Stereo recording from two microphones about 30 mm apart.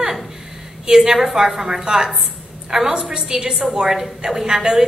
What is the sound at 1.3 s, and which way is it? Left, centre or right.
A woman's voice, centre.